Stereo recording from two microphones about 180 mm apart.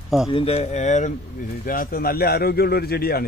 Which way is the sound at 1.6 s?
50° left (ahead or behind).